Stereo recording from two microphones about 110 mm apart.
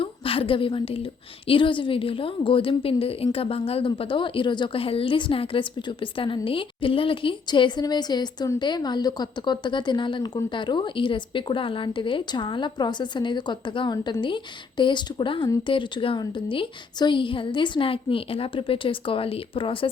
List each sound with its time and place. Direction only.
0.0 s a woman's voice: 55° left (ahead or behind)